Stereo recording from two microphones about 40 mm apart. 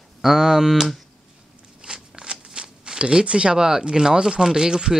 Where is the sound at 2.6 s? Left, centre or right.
Right.